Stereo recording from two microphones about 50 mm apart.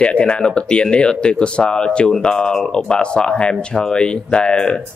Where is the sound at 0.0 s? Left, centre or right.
Left.